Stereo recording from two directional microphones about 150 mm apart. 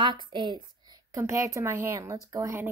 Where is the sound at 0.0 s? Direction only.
30° right (ahead or behind).